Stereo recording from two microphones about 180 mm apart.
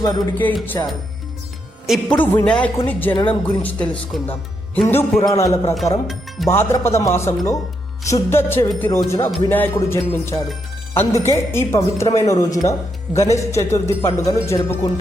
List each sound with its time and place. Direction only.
0.0 s speech: 15° left (ahead or behind)
1.9 s speech: 10° left (ahead or behind)